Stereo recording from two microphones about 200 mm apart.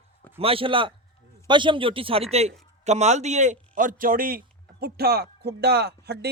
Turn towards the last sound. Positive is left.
turn(degrees=-55)  # may be behind; listen again after turning